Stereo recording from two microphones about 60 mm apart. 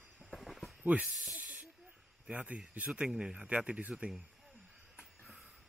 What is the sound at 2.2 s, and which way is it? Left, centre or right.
Speech, right.